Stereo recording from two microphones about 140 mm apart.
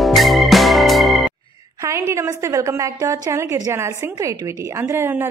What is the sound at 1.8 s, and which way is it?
A woman's voice, 20° right (ahead or behind).